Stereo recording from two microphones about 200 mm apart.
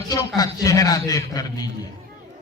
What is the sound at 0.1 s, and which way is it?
Speech, 15° left (ahead or behind).